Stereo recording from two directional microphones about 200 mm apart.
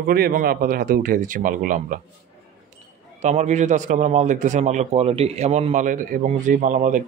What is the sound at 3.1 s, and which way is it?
A man's voice, 35° right (ahead or behind).